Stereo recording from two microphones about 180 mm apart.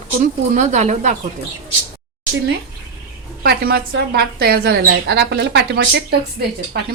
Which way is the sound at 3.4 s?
60° right (ahead or behind).